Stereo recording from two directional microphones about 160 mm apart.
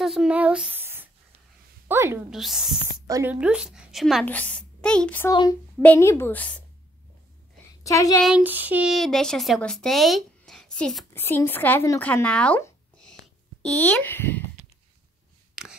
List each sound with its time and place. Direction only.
0.0 s a woman's voice: 5° right (ahead or behind)
2.3 s speech: centre (ahead or behind)
5.3 s speech: 25° left (ahead or behind)
5.8 s a woman's voice: 15° left (ahead or behind)
7.8 s speech: 20° left (ahead or behind)
8.2 s speech: 5° right (ahead or behind)
11.1 s a woman's voice: 15° left (ahead or behind)
15.6 s filing: 5° right (ahead or behind)